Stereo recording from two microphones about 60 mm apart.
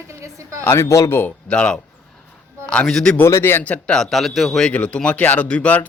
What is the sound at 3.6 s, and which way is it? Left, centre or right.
Speech, left.